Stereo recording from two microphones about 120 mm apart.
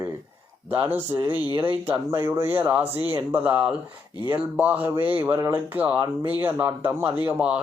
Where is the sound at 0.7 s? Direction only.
15° right (ahead or behind).